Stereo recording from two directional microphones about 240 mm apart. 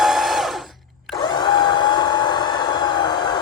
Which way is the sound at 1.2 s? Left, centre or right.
Centre.